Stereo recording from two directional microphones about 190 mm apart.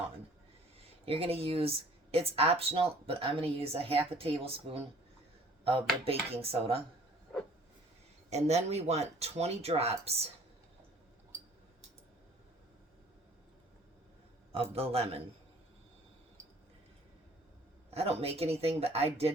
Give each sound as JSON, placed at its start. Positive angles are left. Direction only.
{"t": 1.0, "sound": "speech", "side_deg": -30}
{"t": 6.1, "sound": "speech", "side_deg": -30}
{"t": 8.3, "sound": "speech", "side_deg": -35}
{"t": 14.5, "sound": "speech", "side_deg": -30}
{"t": 17.9, "sound": "speech", "side_deg": -30}